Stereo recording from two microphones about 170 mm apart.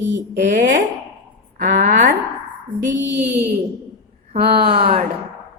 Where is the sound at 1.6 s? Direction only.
50° right (ahead or behind).